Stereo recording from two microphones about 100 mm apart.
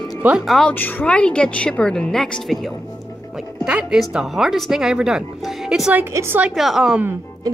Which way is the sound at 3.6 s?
10° right (ahead or behind).